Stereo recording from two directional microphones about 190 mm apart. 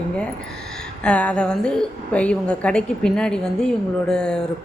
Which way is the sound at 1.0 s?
5° left (ahead or behind).